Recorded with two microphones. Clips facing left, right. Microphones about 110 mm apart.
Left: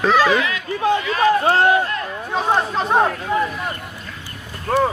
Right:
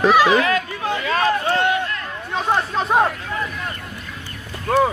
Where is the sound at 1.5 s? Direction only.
35° left (ahead or behind).